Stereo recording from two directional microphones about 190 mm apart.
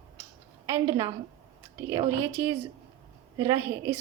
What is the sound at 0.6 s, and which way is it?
A woman's voice, 15° right (ahead or behind).